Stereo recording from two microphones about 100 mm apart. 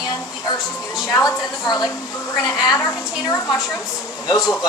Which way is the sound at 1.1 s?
40° left (ahead or behind).